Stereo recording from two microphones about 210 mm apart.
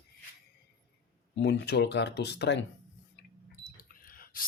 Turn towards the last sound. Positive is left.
turn(degrees=45)  # may be behind; listen again after turning